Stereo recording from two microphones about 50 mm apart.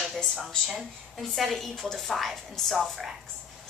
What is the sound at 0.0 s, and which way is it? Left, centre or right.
A woman's voice, centre.